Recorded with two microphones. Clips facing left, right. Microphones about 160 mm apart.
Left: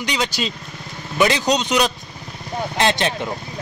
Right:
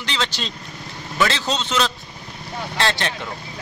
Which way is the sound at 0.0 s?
15° left (ahead or behind).